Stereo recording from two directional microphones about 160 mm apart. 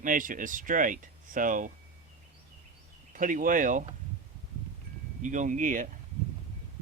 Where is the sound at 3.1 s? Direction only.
55° right (ahead or behind).